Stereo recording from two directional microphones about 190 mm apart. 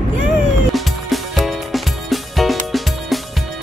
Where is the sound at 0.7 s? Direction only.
Centre (ahead or behind).